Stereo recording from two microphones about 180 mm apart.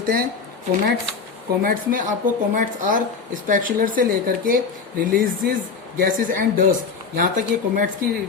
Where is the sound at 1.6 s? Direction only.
50° right (ahead or behind).